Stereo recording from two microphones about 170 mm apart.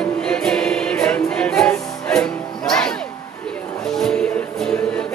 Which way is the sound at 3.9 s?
5° left (ahead or behind).